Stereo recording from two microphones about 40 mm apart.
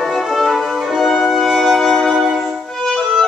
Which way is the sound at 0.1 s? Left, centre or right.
Centre.